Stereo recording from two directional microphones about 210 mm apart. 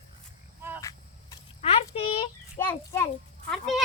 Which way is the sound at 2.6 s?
10° left (ahead or behind).